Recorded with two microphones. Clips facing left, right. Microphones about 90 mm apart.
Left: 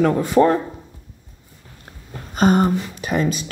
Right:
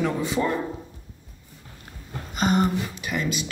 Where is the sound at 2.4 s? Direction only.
40° left (ahead or behind).